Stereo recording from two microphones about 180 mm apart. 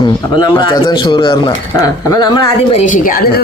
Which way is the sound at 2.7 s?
40° left (ahead or behind).